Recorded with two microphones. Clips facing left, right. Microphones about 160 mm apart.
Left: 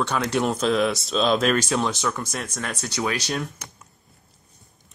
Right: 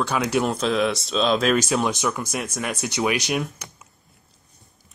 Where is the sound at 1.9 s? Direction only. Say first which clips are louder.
Right 2 dB; 10° right (ahead or behind).